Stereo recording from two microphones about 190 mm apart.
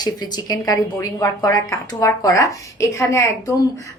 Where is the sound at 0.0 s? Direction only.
20° left (ahead or behind).